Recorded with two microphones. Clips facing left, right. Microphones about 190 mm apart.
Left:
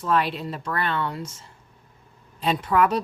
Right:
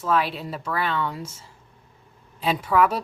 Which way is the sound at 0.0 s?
Centre (ahead or behind).